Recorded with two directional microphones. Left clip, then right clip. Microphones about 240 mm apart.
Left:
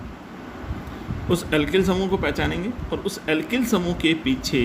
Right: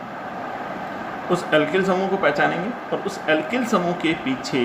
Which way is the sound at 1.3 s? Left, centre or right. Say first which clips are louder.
Right 2 dB; left.